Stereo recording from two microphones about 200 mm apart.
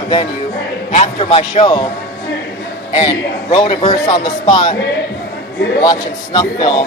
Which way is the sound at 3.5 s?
25° left (ahead or behind).